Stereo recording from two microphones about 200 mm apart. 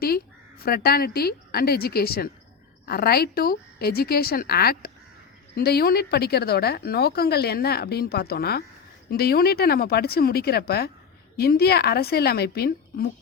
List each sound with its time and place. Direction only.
0.6 s speech: 50° left (ahead or behind)